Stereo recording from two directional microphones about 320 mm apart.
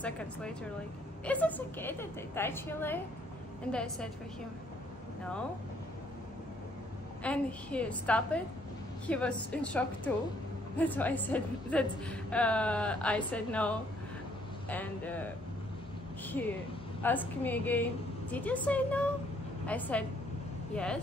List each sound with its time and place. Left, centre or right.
0.0 s a woman's voice: centre
7.2 s a woman's voice: centre
16.4 s a woman's voice: centre